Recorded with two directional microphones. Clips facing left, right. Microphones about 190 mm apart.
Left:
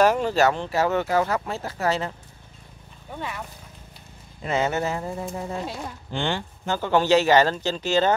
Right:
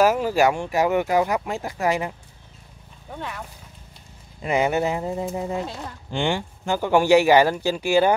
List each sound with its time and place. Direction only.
0.0 s speech: 5° right (ahead or behind)
3.1 s speech: 5° left (ahead or behind)
4.5 s speech: 15° right (ahead or behind)